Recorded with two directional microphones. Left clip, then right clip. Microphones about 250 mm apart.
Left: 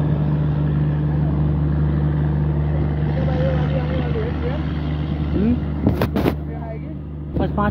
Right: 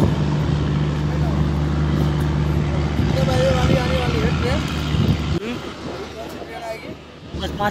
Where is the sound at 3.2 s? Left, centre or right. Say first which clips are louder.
Right 5 dB; left.